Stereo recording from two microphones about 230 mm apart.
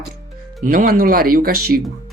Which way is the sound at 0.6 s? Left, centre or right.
Right.